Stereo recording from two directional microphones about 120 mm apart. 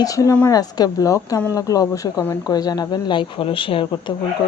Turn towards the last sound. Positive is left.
turn(degrees=45)  # may be behind; listen again after turning